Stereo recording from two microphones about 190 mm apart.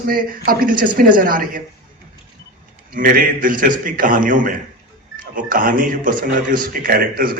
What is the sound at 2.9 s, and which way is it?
Speech, 45° right (ahead or behind).